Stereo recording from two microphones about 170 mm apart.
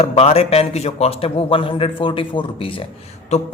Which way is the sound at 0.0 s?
35° left (ahead or behind).